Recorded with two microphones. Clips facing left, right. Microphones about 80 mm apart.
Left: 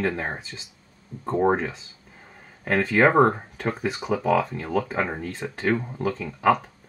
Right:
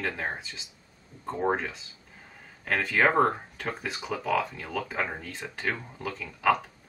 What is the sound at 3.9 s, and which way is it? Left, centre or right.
Speech, left.